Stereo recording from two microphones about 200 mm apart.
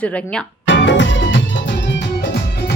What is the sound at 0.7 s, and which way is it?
Music, 65° left (ahead or behind).